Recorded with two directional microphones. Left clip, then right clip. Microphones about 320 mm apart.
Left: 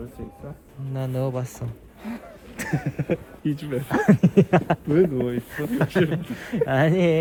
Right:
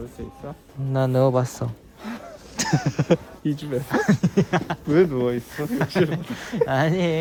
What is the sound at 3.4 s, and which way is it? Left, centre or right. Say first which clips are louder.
Speech: right 1 dB; centre.